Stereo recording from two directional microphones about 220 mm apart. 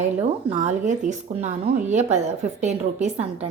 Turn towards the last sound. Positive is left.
turn(degrees=-30)  # may be behind; listen again after turning